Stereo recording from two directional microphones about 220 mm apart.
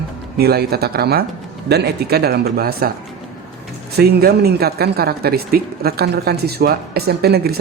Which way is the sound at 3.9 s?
45° right (ahead or behind).